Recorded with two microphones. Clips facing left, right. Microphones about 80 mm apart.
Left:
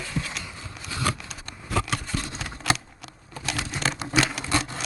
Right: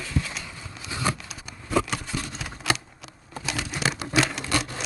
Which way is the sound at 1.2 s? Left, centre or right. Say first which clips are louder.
Left 1 dB; centre.